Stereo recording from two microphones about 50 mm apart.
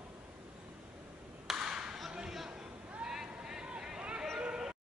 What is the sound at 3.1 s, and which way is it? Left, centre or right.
Vehicle, centre.